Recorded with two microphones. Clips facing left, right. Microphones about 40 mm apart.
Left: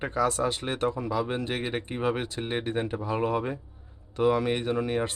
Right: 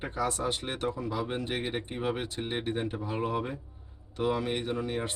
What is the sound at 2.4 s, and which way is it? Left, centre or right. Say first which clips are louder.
Speech: left 2 dB; left.